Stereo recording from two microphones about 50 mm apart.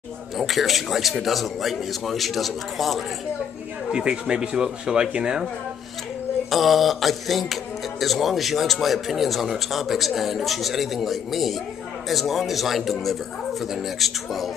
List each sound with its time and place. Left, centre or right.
0.4 s a man's voice: centre
3.9 s speech: centre
6.5 s a man's voice: centre